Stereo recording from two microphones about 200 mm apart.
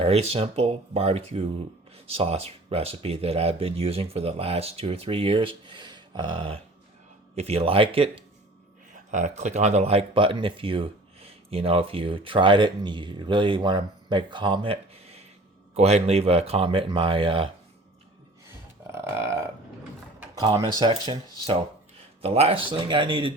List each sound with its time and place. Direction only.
0.0 s speech: 30° right (ahead or behind)
18.9 s burping: 15° right (ahead or behind)
20.4 s speech: 20° right (ahead or behind)
22.2 s speech: 30° right (ahead or behind)